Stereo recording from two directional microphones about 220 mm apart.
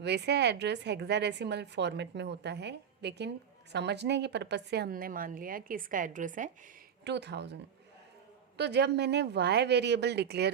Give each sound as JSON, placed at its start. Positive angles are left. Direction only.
{"t": 0.0, "sound": "a woman's voice", "side_deg": -50}
{"t": 7.0, "sound": "a woman's voice", "side_deg": -50}